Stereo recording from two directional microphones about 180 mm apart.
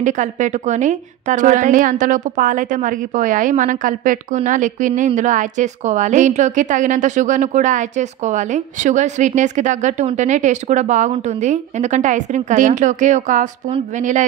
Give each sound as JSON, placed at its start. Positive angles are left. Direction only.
{"t": 0.0, "sound": "a woman's voice", "side_deg": -45}